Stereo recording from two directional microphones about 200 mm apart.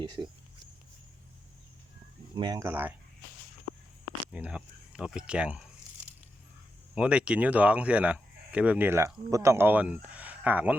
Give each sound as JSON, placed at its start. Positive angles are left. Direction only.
{"t": 0.0, "sound": "speech", "side_deg": -20}
{"t": 2.3, "sound": "speech", "side_deg": -20}
{"t": 4.3, "sound": "speech", "side_deg": -5}
{"t": 6.9, "sound": "speech", "side_deg": -5}